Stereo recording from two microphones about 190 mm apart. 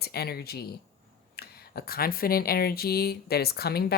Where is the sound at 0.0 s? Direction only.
55° left (ahead or behind).